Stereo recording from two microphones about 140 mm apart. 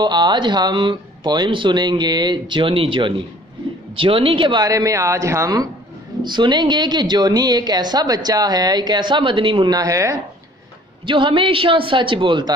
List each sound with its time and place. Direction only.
0.0 s a woman's voice: 30° right (ahead or behind)
11.1 s a woman's voice: 35° right (ahead or behind)